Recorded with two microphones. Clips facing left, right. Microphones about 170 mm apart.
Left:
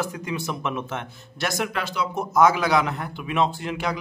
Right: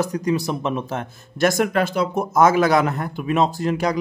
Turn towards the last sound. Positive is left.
turn(degrees=-40)  # may be behind; listen again after turning